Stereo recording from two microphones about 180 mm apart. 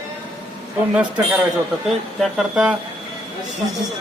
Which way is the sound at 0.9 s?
5° right (ahead or behind).